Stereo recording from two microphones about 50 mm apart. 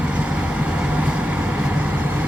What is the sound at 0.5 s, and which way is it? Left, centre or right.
Vehicle, right.